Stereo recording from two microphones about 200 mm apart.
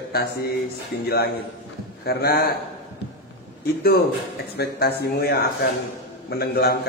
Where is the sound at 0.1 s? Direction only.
50° left (ahead or behind).